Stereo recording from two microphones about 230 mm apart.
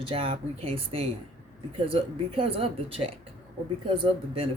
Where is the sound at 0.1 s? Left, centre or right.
Right.